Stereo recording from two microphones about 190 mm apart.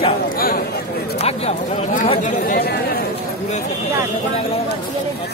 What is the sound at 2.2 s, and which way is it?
Speech, 40° left (ahead or behind).